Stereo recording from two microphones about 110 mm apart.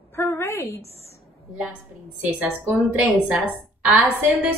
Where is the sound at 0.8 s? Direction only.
70° left (ahead or behind).